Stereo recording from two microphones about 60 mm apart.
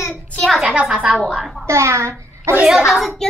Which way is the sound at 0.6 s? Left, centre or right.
Centre.